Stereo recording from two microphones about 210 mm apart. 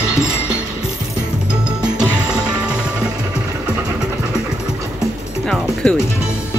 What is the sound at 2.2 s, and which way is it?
Music, 20° right (ahead or behind).